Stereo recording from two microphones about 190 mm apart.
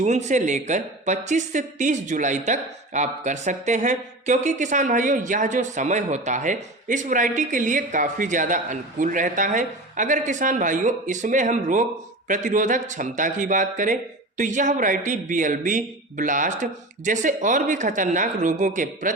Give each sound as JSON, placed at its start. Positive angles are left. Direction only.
{"t": 0.0, "sound": "a woman's voice", "side_deg": -40}